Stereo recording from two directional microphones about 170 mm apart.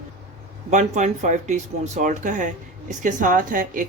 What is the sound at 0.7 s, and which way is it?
A woman's voice, 45° right (ahead or behind).